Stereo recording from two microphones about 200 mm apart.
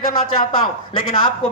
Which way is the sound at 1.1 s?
25° left (ahead or behind).